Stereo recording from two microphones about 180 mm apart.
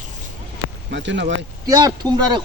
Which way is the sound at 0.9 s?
85° right.